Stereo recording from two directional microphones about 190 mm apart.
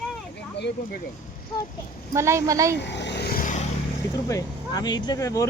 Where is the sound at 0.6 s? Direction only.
65° left (ahead or behind).